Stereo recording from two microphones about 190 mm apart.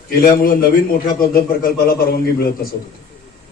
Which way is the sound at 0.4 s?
50° left (ahead or behind).